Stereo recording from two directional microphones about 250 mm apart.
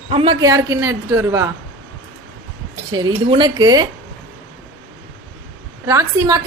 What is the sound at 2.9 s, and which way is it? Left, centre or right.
Speech, centre.